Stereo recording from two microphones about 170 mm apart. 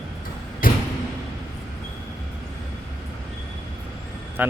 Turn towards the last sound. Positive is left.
turn(degrees=-10)  # may be behind; listen again after turning